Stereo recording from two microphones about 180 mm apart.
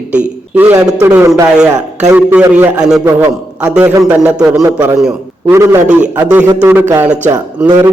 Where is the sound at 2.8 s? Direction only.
5° right (ahead or behind).